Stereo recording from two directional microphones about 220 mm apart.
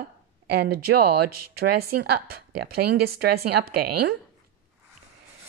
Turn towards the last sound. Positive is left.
turn(degrees=-45)  # may be behind; listen again after turning